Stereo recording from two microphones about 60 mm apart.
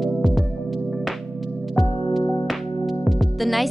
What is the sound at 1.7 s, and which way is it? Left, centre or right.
Music, centre.